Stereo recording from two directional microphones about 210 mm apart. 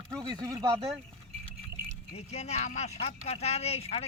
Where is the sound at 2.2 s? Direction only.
30° left (ahead or behind).